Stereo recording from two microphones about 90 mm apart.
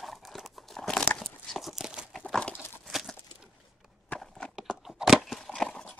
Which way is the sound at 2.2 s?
10° left (ahead or behind).